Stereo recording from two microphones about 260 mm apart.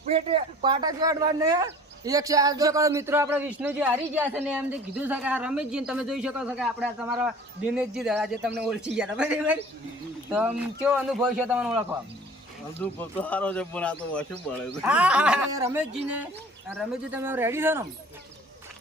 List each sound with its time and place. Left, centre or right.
0.1 s a man's voice: right; by 11.9 s centre
13.0 s a man's voice: centre